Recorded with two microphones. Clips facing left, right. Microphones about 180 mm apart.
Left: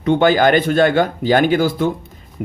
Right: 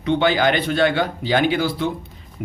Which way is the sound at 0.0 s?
45° left (ahead or behind).